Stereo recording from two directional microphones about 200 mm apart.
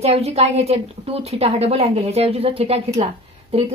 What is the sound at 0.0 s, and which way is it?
A woman's voice, 30° right (ahead or behind).